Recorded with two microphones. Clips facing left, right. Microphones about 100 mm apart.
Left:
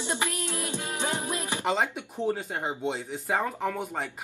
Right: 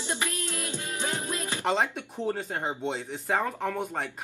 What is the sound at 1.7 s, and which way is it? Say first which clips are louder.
Speech: right 1 dB; centre (ahead or behind).